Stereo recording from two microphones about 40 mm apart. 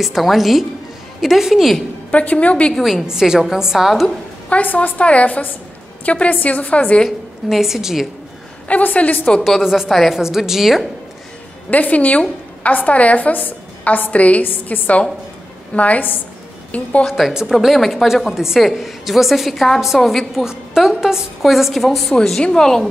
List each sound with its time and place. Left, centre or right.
0.0 s a woman's voice: centre
2.0 s a woman's voice: left
2.8 s a woman's voice: centre
4.5 s a woman's voice: left
7.1 s a woman's voice: centre
8.6 s a woman's voice: left
9.6 s a woman's voice: centre
11.7 s a woman's voice: left
17.3 s a woman's voice: centre
17.6 s a woman's voice: centre
20.4 s a woman's voice: centre
22.4 s a woman's voice: centre